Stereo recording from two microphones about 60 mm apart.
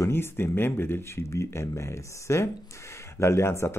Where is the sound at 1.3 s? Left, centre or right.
Left.